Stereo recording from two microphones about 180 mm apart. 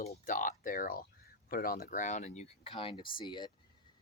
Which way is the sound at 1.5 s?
55° left (ahead or behind).